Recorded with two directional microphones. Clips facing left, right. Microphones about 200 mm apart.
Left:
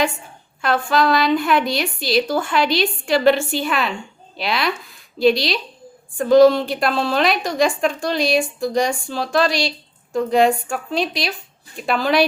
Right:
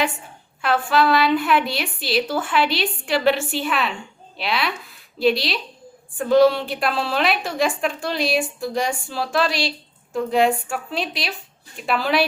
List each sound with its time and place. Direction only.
0.6 s a woman's voice: 5° right (ahead or behind)